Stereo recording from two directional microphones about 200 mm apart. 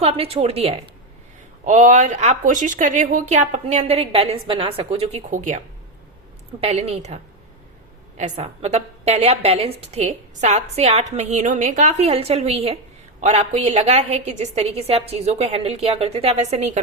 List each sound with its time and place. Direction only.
0.0 s a woman's voice: 30° right (ahead or behind)
6.6 s a woman's voice: 30° right (ahead or behind)
8.2 s a woman's voice: 35° right (ahead or behind)